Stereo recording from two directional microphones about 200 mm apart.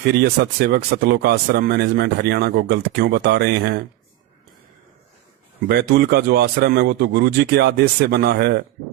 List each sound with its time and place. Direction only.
0.2 s speech: 55° right (ahead or behind)
5.6 s a man's voice: 55° right (ahead or behind)